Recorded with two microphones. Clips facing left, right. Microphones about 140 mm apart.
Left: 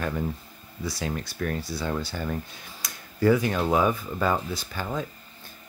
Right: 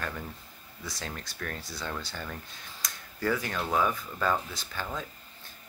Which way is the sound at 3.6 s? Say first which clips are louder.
Left 5 dB; 20° left (ahead or behind).